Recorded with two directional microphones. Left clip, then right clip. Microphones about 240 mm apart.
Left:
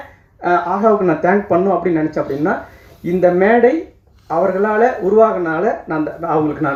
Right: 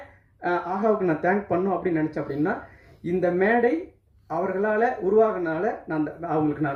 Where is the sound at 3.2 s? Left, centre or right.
Right.